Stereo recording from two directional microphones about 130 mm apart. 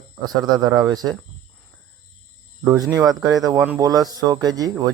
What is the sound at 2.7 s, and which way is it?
Speech, 25° right (ahead or behind).